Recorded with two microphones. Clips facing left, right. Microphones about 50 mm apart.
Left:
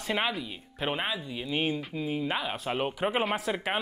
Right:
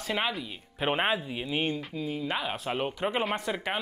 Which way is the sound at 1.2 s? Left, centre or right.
Centre.